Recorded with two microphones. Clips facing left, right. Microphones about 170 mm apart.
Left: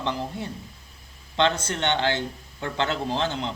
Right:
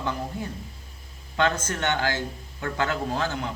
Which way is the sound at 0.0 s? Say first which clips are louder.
Left 1 dB; 25° left (ahead or behind).